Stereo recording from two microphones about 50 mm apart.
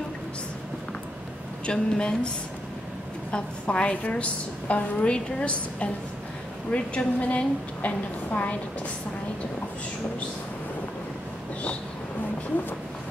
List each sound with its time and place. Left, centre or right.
1.7 s a woman's voice: centre
3.3 s a woman's voice: left